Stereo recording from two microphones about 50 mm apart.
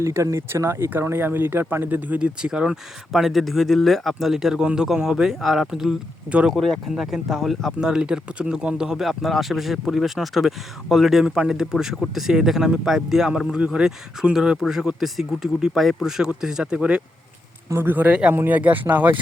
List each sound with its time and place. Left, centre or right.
0.0 s speech: right
1.1 s speech: right
1.9 s speech: right
2.1 s speech: right
3.1 s speech: centre
6.2 s speech: right
6.5 s speech: centre
6.9 s speech: centre
16.7 s speech: right
17.7 s speech: right
18.1 s speech: right